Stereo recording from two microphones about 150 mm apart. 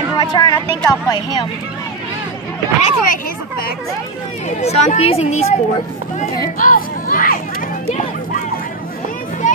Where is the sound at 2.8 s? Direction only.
60° left (ahead or behind).